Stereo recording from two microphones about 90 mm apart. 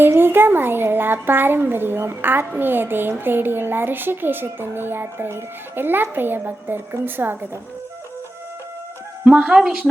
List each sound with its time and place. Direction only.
0.0 s speech: 25° right (ahead or behind)
9.2 s speech: 10° right (ahead or behind)